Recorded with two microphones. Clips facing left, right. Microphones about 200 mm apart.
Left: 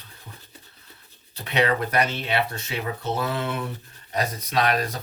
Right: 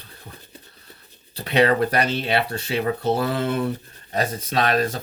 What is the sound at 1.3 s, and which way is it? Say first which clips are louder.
Speech: right 5 dB; 35° right (ahead or behind).